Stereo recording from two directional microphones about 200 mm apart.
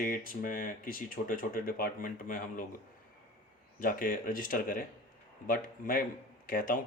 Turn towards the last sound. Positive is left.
turn(degrees=45)  # may be behind; listen again after turning